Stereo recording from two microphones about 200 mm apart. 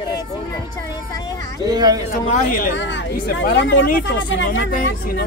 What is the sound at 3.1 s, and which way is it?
Speech, 55° left (ahead or behind).